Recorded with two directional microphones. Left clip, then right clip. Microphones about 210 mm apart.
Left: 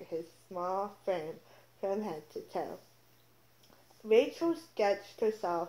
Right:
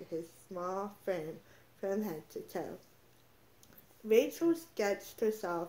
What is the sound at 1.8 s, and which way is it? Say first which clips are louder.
Speech: left 2 dB; 25° right (ahead or behind).